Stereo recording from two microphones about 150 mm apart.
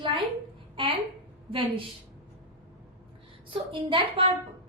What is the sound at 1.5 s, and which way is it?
Speech, 35° right (ahead or behind).